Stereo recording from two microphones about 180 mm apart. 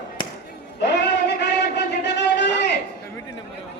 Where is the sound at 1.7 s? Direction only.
75° left (ahead or behind).